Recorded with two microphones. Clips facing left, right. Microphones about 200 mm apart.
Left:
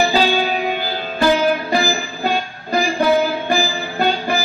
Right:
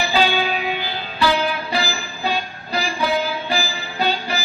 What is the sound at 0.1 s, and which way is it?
Music, 40° left (ahead or behind).